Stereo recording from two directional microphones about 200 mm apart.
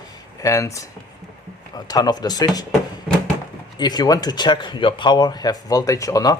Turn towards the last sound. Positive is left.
turn(degrees=15)  # may be behind; listen again after turning